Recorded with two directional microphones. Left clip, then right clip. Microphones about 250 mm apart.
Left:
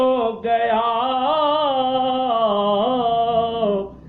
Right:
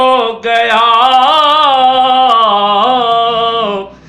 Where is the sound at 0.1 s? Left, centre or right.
Right.